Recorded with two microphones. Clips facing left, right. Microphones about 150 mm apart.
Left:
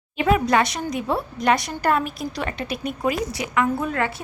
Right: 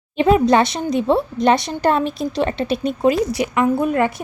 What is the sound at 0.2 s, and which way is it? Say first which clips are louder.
A woman's voice: right 5 dB; 25° right (ahead or behind).